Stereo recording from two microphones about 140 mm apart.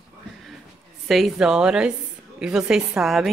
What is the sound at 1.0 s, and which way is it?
A woman's voice, centre (ahead or behind).